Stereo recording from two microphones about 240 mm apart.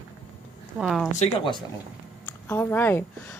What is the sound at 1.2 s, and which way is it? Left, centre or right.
Speech, left.